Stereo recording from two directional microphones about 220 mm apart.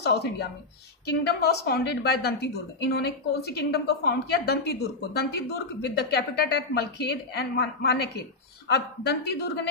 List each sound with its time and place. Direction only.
0.0 s a woman's voice: 50° left (ahead or behind)